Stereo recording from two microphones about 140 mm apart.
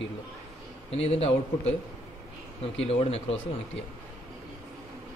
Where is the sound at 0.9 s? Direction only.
45° left (ahead or behind).